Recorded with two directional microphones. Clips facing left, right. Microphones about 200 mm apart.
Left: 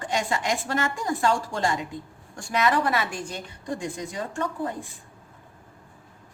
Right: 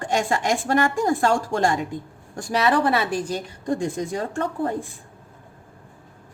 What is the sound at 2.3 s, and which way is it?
Speech, 30° right (ahead or behind).